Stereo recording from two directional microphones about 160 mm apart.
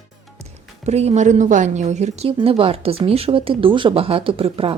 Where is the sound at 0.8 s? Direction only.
45° right (ahead or behind).